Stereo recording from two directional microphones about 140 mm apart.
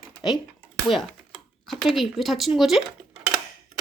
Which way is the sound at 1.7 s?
Centre (ahead or behind).